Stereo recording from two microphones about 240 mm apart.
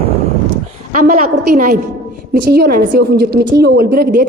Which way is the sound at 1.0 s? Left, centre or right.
Right.